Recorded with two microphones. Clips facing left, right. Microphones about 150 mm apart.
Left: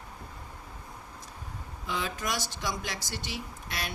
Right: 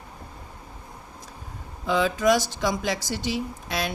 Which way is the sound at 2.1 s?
90° right.